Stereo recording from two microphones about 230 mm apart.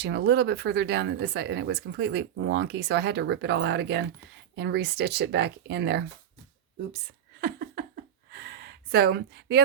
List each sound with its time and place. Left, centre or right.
0.0 s speech: right
7.4 s a sound: right
8.3 s gasp: right